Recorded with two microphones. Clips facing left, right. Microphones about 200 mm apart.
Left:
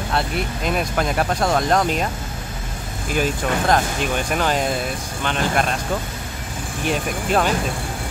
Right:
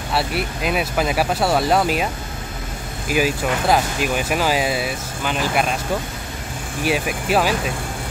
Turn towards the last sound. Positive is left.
turn(degrees=-5)  # may be behind; listen again after turning